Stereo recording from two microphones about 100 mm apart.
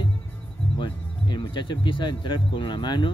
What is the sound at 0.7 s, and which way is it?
Speech, 50° left (ahead or behind).